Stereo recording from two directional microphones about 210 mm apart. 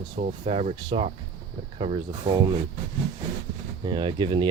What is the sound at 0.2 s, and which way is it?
Speech, 35° right (ahead or behind).